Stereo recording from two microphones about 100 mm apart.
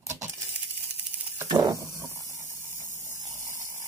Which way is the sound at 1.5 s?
40° right (ahead or behind).